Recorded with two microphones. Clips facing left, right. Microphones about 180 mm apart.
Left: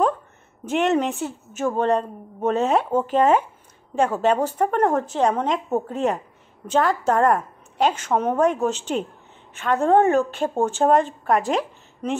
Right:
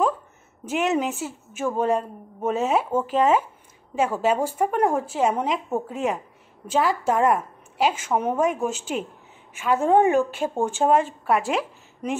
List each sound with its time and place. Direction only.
0.7 s a woman's voice: 5° right (ahead or behind)
11.3 s speech: 40° left (ahead or behind)